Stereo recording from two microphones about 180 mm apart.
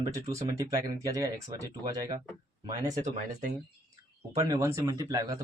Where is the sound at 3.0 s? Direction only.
40° right (ahead or behind).